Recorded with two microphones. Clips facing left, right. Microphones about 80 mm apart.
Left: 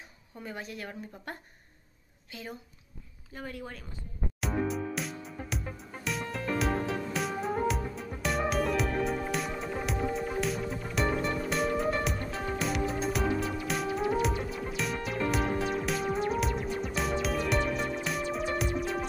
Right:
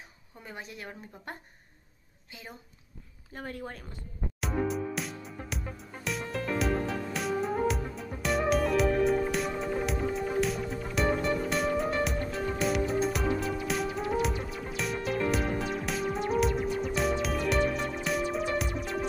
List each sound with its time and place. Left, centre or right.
0.5 s speech: centre
3.3 s speech: right
4.4 s music: centre